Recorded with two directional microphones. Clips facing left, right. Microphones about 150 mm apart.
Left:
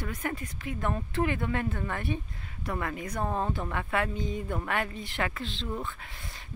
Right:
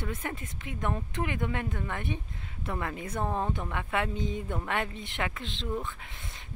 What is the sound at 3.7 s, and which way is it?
Speech, 15° right (ahead or behind).